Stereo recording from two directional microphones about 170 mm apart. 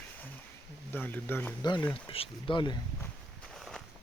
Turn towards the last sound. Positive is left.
turn(degrees=0)  # may be behind; listen again after turning